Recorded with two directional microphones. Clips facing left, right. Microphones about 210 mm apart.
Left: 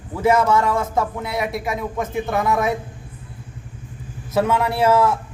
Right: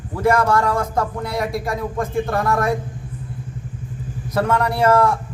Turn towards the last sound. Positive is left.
turn(degrees=5)  # may be behind; listen again after turning